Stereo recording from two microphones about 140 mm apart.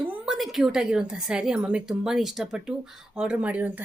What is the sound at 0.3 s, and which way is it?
A woman's voice, centre (ahead or behind).